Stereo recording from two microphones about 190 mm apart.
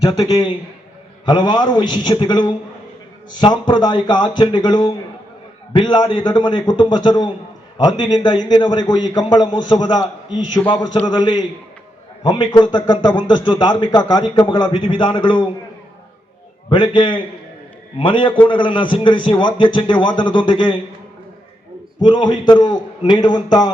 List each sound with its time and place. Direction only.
0.0 s a man's voice: 20° left (ahead or behind)
11.0 s a man's voice: 25° left (ahead or behind)
16.6 s a man's voice: 25° left (ahead or behind)
22.0 s a man's voice: 25° left (ahead or behind)